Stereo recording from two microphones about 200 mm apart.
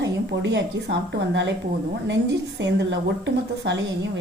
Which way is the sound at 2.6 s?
65° right (ahead or behind).